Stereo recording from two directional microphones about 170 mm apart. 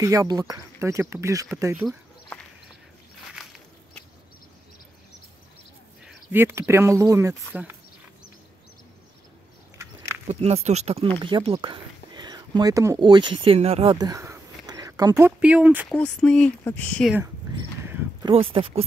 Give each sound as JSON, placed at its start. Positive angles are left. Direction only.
{"t": 0.0, "sound": "speech", "side_deg": -20}
{"t": 3.3, "sound": "walk", "side_deg": 0}
{"t": 6.0, "sound": "speech", "side_deg": -15}
{"t": 10.2, "sound": "speech", "side_deg": -40}
{"t": 13.9, "sound": "speech", "side_deg": -20}
{"t": 15.9, "sound": "speech", "side_deg": 5}
{"t": 17.2, "sound": "a sound", "side_deg": -20}
{"t": 18.3, "sound": "speech", "side_deg": -30}